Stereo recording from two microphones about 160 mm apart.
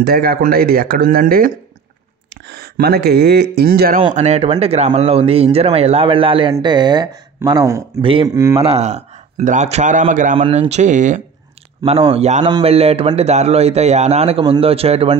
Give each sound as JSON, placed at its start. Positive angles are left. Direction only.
{"t": 0.0, "sound": "speech", "side_deg": -70}
{"t": 2.4, "sound": "speech", "side_deg": -90}
{"t": 4.1, "sound": "a man's voice", "side_deg": -45}
{"t": 10.3, "sound": "a man's voice", "side_deg": -35}
{"t": 11.8, "sound": "speech", "side_deg": -40}